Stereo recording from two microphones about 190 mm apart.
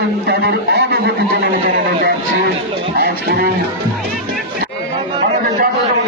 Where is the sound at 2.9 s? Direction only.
55° right (ahead or behind).